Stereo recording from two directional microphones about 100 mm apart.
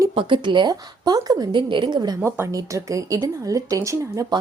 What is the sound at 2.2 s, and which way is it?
Speech, 30° right (ahead or behind).